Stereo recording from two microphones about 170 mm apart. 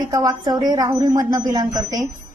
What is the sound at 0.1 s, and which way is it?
A woman's voice, 20° right (ahead or behind).